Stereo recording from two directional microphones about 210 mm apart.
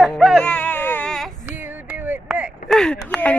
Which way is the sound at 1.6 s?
10° right (ahead or behind).